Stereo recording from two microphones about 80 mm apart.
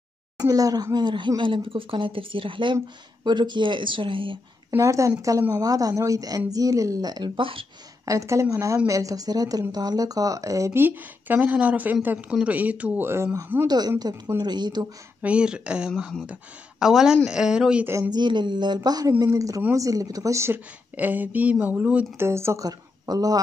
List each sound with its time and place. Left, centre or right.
0.4 s speech: right
0.9 s speech: right
3.3 s speech: right
4.6 s speech: right
8.0 s a woman's voice: right
10.8 s speech: right
13.7 s speech: right
15.2 s speech: centre
18.1 s speech: right
18.9 s speech: right
20.9 s speech: right
22.2 s a woman's voice: right
22.7 s speech: right